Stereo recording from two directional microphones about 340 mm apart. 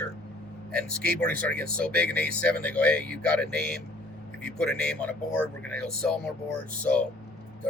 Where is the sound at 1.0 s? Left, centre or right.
Right.